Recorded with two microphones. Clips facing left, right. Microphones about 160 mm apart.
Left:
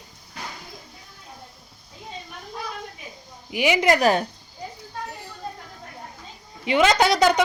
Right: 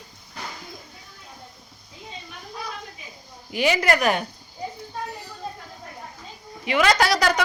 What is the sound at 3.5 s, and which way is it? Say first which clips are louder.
Speech: left 1 dB; 15° left (ahead or behind).